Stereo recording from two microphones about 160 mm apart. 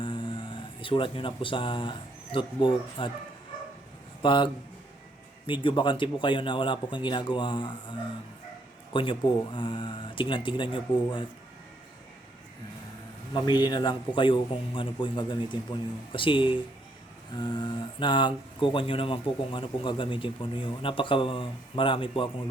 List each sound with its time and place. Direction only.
0.0 s speech: 30° left (ahead or behind)
4.2 s speech: 30° left (ahead or behind)
5.5 s a man's voice: 30° left (ahead or behind)
13.3 s a man's voice: 25° left (ahead or behind)